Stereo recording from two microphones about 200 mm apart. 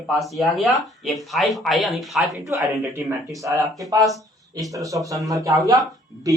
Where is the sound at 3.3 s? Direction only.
15° right (ahead or behind).